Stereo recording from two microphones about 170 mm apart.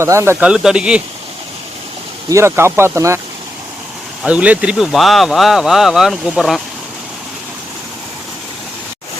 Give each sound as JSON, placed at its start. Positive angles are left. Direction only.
{"t": 0.0, "sound": "speech", "side_deg": -15}
{"t": 2.3, "sound": "speech", "side_deg": -15}
{"t": 4.2, "sound": "speech", "side_deg": -5}